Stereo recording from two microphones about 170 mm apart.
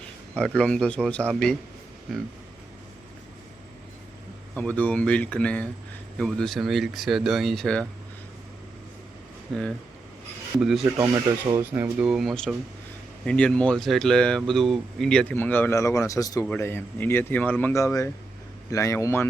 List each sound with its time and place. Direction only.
0.3 s speech: 5° left (ahead or behind)
4.5 s speech: 10° left (ahead or behind)
9.5 s speech: centre (ahead or behind)
10.9 s speech: 20° right (ahead or behind); by 19.3 s 15° left (ahead or behind)